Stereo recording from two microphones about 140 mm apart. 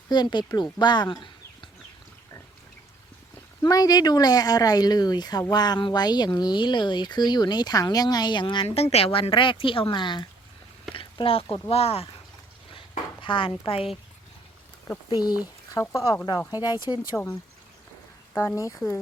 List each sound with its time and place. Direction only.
0.1 s speech: 30° left (ahead or behind)
3.6 s speech: 25° left (ahead or behind)
8.6 s speech: 45° left (ahead or behind)
10.9 s a sound: 40° left (ahead or behind)
11.7 s speech: 45° left (ahead or behind)
13.2 s speech: 35° left (ahead or behind)
15.1 s speech: 30° left (ahead or behind)
18.3 s speech: 20° left (ahead or behind)